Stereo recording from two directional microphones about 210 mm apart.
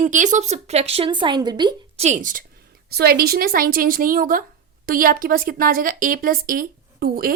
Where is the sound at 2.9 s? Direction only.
50° right (ahead or behind).